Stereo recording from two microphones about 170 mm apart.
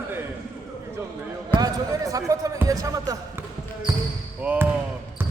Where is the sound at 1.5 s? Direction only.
20° right (ahead or behind).